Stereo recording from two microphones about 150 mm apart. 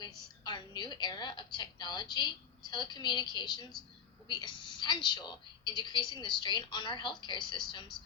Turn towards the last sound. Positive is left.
turn(degrees=30)  # may be behind; listen again after turning